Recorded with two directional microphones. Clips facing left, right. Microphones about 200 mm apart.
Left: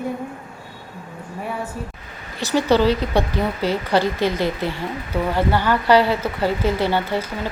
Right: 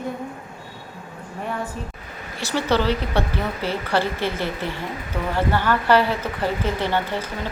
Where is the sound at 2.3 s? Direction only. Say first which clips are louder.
Left 4 dB; 15° left (ahead or behind).